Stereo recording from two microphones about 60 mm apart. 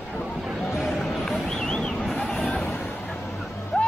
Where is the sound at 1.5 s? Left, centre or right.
Centre.